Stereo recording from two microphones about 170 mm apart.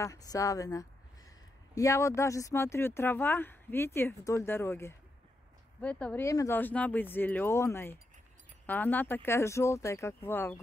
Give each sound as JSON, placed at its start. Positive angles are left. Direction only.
{"t": 0.0, "sound": "speech", "side_deg": 20}